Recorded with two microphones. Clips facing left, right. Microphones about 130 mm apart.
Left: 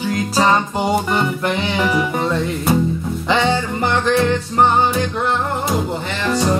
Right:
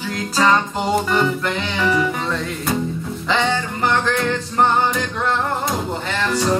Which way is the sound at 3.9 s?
15° left (ahead or behind).